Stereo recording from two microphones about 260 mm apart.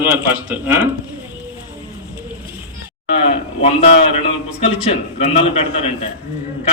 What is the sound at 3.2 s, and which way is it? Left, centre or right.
A man's voice, left.